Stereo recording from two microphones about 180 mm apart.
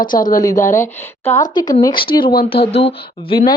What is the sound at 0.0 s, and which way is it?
Speech, 50° left (ahead or behind).